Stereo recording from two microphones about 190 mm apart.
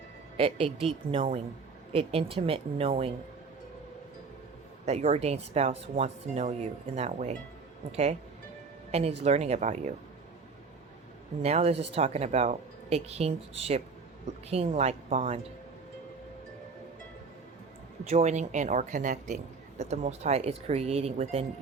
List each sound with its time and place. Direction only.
0.3 s a woman's voice: 30° right (ahead or behind)
4.9 s speech: 35° right (ahead or behind)
8.9 s speech: 35° right (ahead or behind)
11.4 s speech: 35° right (ahead or behind)
18.0 s speech: 35° right (ahead or behind)